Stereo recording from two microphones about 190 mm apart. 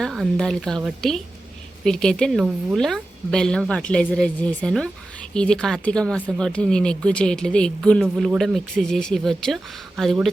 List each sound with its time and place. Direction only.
0.0 s speech: centre (ahead or behind)
8.0 s speech: 5° right (ahead or behind)